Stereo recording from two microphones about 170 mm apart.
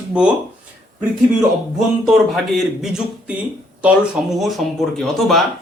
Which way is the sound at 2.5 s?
Centre (ahead or behind).